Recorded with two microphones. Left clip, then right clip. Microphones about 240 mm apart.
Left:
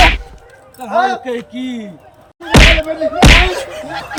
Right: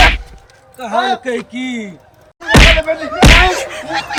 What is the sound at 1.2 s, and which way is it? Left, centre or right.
Speech, centre.